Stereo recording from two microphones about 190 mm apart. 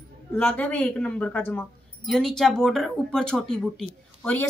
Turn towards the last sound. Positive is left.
turn(degrees=5)  # may be behind; listen again after turning